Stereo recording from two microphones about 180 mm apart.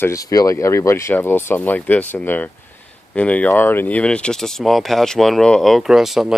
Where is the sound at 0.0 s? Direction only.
20° left (ahead or behind).